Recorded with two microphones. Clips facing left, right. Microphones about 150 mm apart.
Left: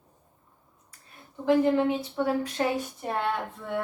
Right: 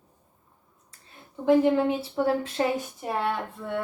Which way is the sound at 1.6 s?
30° right (ahead or behind).